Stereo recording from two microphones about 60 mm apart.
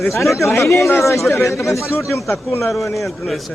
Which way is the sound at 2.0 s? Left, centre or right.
Left.